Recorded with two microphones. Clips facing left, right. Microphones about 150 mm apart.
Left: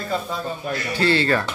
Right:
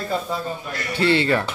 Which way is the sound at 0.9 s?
25° right (ahead or behind).